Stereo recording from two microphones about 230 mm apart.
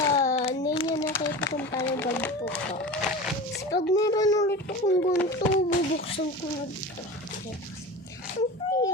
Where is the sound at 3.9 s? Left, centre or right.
Centre.